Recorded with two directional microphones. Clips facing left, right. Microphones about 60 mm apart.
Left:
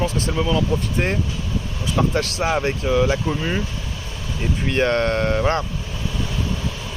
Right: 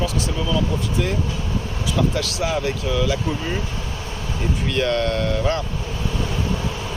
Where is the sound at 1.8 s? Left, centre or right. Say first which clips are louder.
Left 2 dB; left.